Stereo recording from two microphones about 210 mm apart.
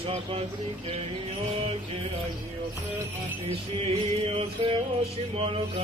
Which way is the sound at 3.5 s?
30° right (ahead or behind).